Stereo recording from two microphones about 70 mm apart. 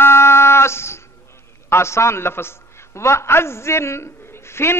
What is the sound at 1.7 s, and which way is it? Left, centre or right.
A man's voice, left.